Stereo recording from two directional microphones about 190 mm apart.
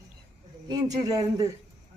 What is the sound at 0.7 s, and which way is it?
Speech, 20° right (ahead or behind).